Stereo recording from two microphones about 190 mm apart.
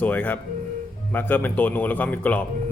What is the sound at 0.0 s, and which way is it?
A man's voice, 10° left (ahead or behind).